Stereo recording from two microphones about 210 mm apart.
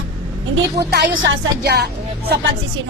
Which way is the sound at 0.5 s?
50° right (ahead or behind).